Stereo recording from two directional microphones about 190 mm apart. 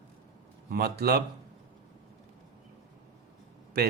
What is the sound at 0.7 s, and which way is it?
Speech, 55° right (ahead or behind).